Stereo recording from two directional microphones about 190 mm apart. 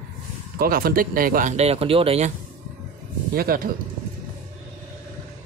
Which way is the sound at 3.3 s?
50° right (ahead or behind).